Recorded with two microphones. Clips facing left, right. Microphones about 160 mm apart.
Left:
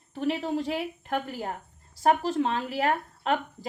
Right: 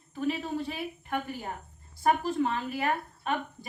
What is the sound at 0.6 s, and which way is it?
Speech, 90° left.